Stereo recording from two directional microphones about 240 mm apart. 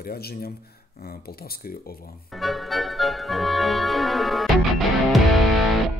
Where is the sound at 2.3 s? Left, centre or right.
Centre.